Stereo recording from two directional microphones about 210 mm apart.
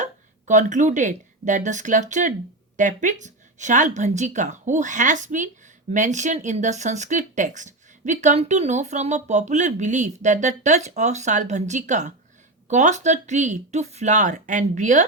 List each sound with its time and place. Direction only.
0.0 s speech: 35° right (ahead or behind)